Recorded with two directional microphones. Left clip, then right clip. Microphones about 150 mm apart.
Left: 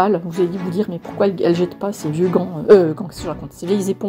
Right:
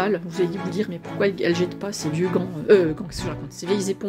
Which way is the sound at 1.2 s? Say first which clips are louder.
Left 5 dB; 10° left (ahead or behind).